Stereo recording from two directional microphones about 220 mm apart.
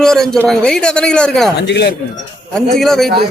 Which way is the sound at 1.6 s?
50° left (ahead or behind).